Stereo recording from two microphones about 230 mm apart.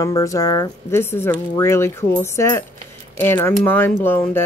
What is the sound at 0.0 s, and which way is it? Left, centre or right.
Speech, centre.